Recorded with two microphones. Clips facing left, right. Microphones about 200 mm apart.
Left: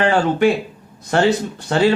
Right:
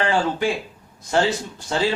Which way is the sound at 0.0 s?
65° left (ahead or behind).